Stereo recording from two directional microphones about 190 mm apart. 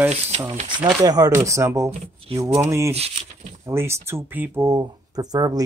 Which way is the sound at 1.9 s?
30° right (ahead or behind).